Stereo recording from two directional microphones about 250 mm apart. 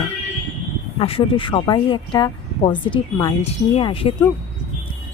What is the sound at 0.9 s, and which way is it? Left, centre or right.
Speech, left.